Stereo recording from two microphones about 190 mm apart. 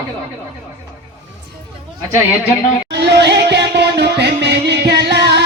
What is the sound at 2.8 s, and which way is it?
Music, 60° right (ahead or behind).